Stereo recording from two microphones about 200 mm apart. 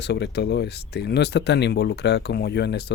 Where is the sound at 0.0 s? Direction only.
55° left (ahead or behind).